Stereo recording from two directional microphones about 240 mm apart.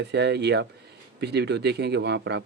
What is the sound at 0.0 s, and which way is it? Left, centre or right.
Speech, right.